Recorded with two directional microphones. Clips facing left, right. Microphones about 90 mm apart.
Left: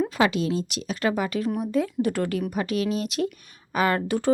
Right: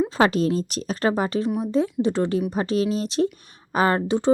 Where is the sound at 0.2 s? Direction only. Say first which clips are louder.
Right 4 dB; 40° right (ahead or behind).